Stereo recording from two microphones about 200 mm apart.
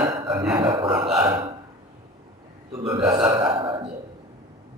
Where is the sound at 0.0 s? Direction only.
25° right (ahead or behind).